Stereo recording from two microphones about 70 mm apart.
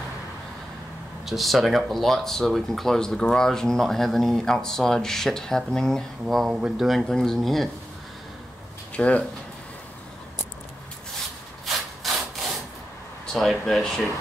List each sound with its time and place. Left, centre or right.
1.2 s speech: centre
8.9 s speech: centre
11.6 s sawing: centre
13.3 s speech: centre